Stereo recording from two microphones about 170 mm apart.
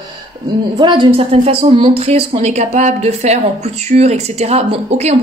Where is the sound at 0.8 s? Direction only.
30° right (ahead or behind).